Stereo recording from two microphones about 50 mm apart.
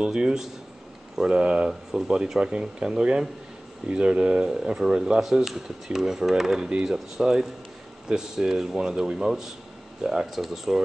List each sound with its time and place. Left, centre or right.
0.0 s speech: centre
1.7 s speech: centre